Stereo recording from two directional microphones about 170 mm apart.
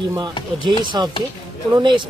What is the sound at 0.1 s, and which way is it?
Speech, 25° right (ahead or behind).